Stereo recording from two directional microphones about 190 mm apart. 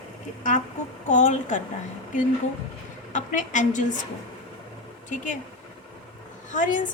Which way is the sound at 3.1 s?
40° left (ahead or behind).